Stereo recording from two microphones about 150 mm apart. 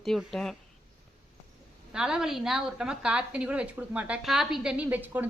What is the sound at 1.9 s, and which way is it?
A woman's voice, 5° right (ahead or behind).